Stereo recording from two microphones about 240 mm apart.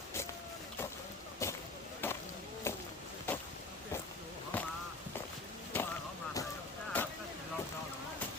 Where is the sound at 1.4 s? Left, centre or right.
Centre.